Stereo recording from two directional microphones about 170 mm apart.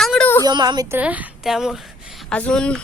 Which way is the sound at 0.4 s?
25° right (ahead or behind).